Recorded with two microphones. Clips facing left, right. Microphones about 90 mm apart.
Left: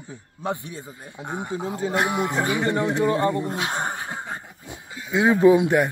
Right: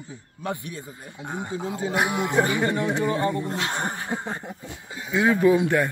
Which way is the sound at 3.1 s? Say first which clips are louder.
Left 3 dB; 25° left (ahead or behind).